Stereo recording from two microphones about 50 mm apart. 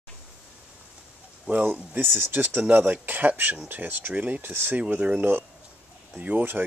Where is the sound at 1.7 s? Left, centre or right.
Right.